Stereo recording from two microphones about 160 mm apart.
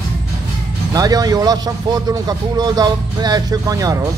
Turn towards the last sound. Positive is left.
turn(degrees=-20)  # may be behind; listen again after turning